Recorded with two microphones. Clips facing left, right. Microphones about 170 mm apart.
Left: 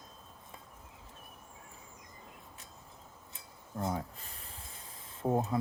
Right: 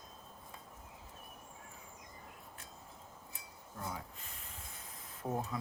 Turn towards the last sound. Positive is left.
turn(degrees=30)  # may be behind; listen again after turning